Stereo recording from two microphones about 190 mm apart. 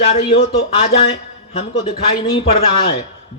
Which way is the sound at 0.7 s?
30° left (ahead or behind).